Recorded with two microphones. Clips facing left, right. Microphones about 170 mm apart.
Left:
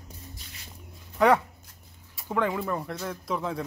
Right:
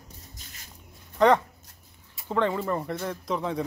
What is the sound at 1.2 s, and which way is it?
Speech, 10° left (ahead or behind).